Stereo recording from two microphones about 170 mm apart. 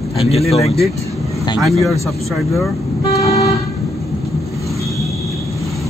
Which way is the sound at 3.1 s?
20° left (ahead or behind).